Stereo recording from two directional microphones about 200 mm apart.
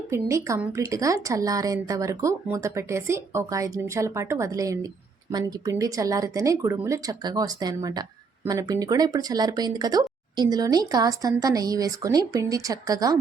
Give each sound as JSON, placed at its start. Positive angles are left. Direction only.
{"t": 0.1, "sound": "speech", "side_deg": -15}